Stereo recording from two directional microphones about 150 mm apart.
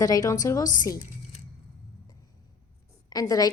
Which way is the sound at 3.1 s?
25° left (ahead or behind).